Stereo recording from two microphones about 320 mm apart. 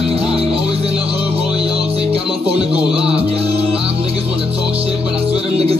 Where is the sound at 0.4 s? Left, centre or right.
Centre.